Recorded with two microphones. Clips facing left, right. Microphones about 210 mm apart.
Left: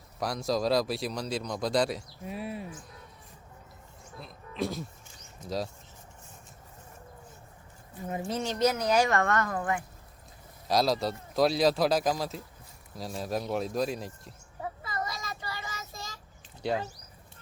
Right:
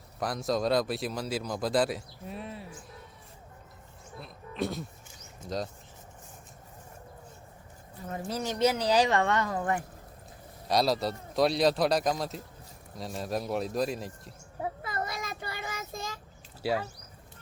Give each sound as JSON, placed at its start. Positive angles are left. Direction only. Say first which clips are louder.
{"t": 0.2, "sound": "speech", "louder": "even", "side_deg": 0}
{"t": 4.2, "sound": "a sound", "louder": "even", "side_deg": 0}
{"t": 8.0, "sound": "speech", "louder": "left 3 dB", "side_deg": 15}
{"t": 8.5, "sound": "a woman's voice", "louder": "right 1 dB", "side_deg": -15}
{"t": 10.7, "sound": "speech", "louder": "even", "side_deg": 0}
{"t": 14.6, "sound": "child singing", "louder": "right 2 dB", "side_deg": -55}
{"t": 16.6, "sound": "speech", "louder": "right 1 dB", "side_deg": -5}